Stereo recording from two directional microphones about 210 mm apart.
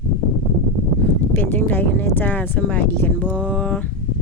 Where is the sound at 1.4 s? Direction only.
10° left (ahead or behind).